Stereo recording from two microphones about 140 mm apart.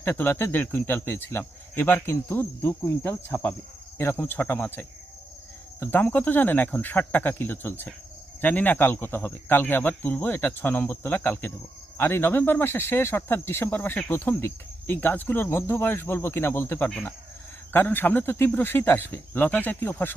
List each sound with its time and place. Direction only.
0.0 s speech: 15° left (ahead or behind)